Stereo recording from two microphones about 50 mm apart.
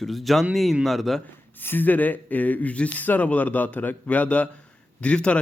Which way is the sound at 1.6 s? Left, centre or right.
Left.